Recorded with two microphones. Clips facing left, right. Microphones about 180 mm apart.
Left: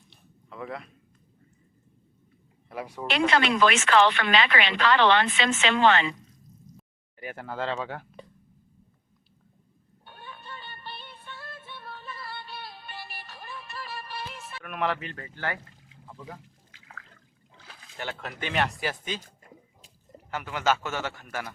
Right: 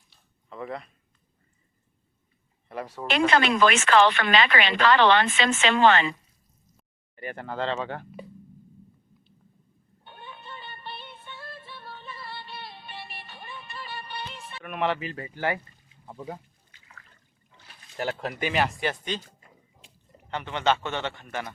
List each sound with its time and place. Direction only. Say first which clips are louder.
0.5 s a man's voice: right 2 dB; centre (ahead or behind)
2.6 s speech: right 1 dB; 10° left (ahead or behind)
3.1 s speech: right 2 dB; 45° right (ahead or behind)
6.7 s speech: right 2 dB; 5° left (ahead or behind)
10.1 s music: right 1 dB; centre (ahead or behind)
15.1 s speech: right 5 dB; 15° right (ahead or behind)
15.6 s a sound: left 5 dB; 90° left
16.7 s water: left 5 dB; 90° left
18.0 s speech: right 6 dB; 35° right (ahead or behind)
18.3 s a man's voice: right 1 dB; 5° right (ahead or behind)
19.4 s water: left 4 dB; 40° left (ahead or behind)
20.3 s a man's voice: right 1 dB; 5° left (ahead or behind)